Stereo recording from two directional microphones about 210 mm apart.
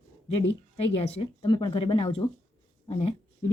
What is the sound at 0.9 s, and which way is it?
Speech, 30° left (ahead or behind).